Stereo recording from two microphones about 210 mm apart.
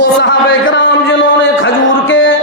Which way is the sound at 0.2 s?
60° left (ahead or behind).